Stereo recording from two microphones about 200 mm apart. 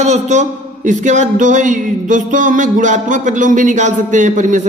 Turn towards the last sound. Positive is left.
turn(degrees=-40)  # may be behind; listen again after turning